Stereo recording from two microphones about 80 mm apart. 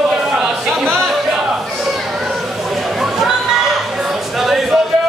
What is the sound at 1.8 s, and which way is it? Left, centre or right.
Children playing, centre.